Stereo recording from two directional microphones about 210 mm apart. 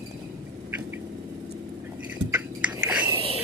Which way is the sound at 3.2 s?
25° right (ahead or behind).